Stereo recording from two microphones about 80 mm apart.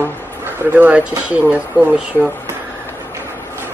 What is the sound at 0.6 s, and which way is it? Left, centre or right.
Speech, right.